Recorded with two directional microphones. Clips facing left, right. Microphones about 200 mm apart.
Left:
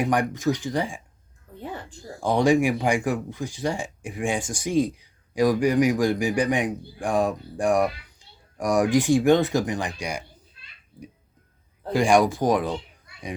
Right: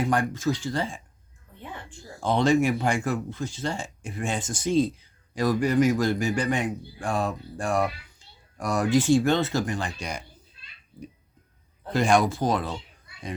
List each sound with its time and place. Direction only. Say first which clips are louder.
0.0 s speech: left 2 dB; 15° left (ahead or behind)
1.5 s music: left 6 dB; 35° left (ahead or behind)
2.2 s speech: left 2 dB; 15° left (ahead or behind)
11.9 s speech: left 3 dB; 10° left (ahead or behind)